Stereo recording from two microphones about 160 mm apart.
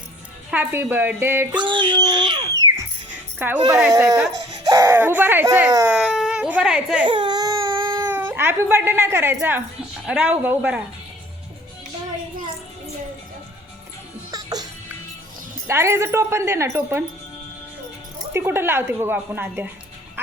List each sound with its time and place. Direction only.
0.5 s speech: 10° right (ahead or behind)
1.5 s a child's voice: 30° right (ahead or behind)
3.3 s a child's voice: 10° right (ahead or behind)
7.1 s baby cry: 30° right (ahead or behind)
8.0 s speech: 15° right (ahead or behind)
14.3 s music: 25° right (ahead or behind)
15.6 s speech: 15° right (ahead or behind)
18.3 s speech: 15° right (ahead or behind)